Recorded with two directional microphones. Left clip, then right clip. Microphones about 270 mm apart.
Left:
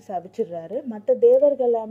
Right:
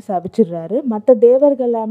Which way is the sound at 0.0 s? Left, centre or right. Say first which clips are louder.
Right 10 dB; right.